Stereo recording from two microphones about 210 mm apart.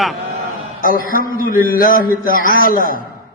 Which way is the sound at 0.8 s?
40° left (ahead or behind).